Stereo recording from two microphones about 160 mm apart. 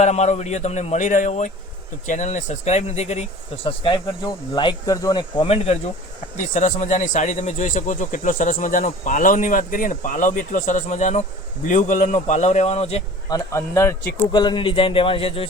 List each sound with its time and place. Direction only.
0.0 s speech: 45° left (ahead or behind)
13.3 s speech: 15° left (ahead or behind)
14.3 s a man's voice: 30° left (ahead or behind)